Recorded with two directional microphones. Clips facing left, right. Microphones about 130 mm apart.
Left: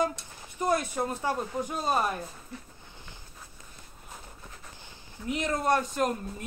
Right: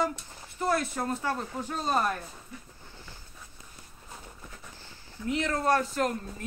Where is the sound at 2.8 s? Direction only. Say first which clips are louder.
Right 1 dB; 20° left (ahead or behind).